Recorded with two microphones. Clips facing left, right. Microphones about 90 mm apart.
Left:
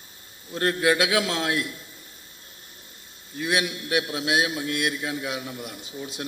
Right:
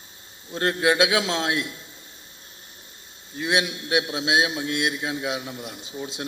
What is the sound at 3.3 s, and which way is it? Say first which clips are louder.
A man's voice: right 1 dB; 25° right (ahead or behind).